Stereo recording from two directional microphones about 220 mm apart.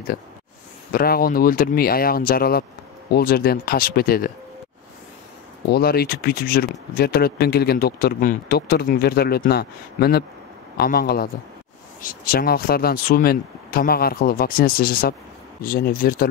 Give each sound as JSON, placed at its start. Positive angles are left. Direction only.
{"t": 0.9, "sound": "speech", "side_deg": 45}
{"t": 5.7, "sound": "speech", "side_deg": 45}